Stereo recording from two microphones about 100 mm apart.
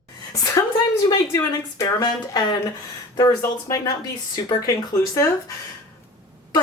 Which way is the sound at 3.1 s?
30° left (ahead or behind).